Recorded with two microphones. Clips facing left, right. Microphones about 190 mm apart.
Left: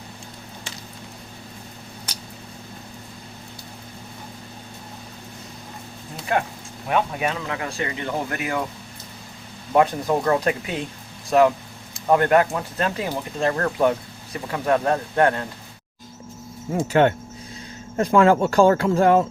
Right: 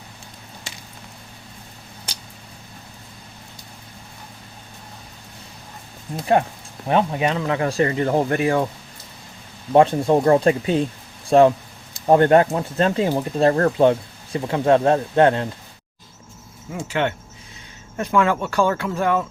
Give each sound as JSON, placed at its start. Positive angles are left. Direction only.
{"t": 6.8, "sound": "speech", "side_deg": -30}
{"t": 9.7, "sound": "speech", "side_deg": -25}
{"t": 16.7, "sound": "speech", "side_deg": 40}